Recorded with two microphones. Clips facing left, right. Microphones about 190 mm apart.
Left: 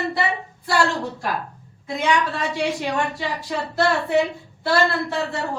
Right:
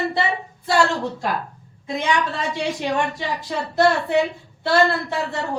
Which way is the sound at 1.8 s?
15° right (ahead or behind).